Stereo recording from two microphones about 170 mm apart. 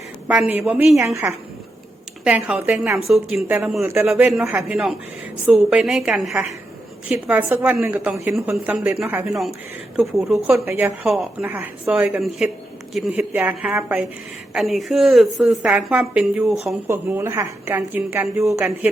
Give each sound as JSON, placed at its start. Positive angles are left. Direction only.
{"t": 0.3, "sound": "a woman's voice", "side_deg": -10}
{"t": 2.2, "sound": "a woman's voice", "side_deg": -5}
{"t": 10.7, "sound": "a woman's voice", "side_deg": -15}
{"t": 11.0, "sound": "a woman's voice", "side_deg": -5}
{"t": 16.8, "sound": "a woman's voice", "side_deg": -15}